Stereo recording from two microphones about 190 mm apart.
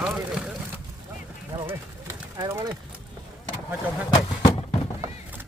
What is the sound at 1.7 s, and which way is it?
Pigeon, 15° right (ahead or behind).